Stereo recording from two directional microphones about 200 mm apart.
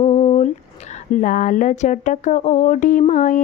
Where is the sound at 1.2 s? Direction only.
40° left (ahead or behind).